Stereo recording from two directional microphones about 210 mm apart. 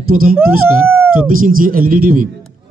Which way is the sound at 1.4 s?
40° right (ahead or behind).